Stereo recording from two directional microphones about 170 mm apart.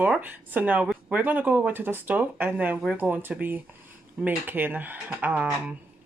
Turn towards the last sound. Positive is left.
turn(degrees=-10)  # may be behind; listen again after turning